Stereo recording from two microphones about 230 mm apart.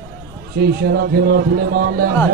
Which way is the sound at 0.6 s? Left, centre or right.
Right.